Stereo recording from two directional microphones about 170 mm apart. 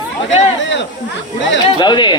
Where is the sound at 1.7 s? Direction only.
25° left (ahead or behind).